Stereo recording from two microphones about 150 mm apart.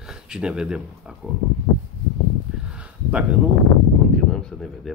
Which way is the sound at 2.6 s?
10° right (ahead or behind).